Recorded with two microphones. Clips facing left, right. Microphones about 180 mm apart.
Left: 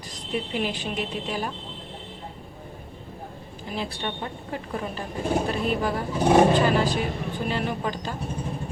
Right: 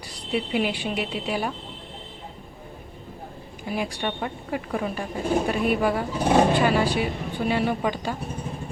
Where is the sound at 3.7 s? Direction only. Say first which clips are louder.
Right 3 dB; 15° right (ahead or behind).